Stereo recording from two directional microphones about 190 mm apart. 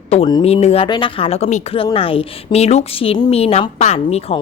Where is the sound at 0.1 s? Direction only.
25° left (ahead or behind).